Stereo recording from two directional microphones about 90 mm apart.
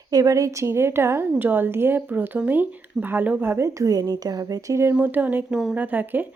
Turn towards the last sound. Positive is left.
turn(degrees=-20)  # may be behind; listen again after turning